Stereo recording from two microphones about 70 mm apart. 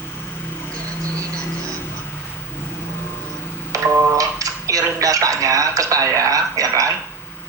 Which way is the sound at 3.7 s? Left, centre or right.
Right.